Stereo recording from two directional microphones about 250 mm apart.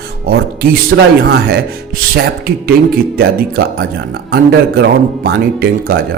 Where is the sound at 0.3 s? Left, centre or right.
Right.